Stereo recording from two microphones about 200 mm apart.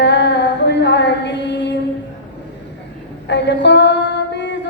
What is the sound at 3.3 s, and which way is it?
Female singing, 60° left (ahead or behind).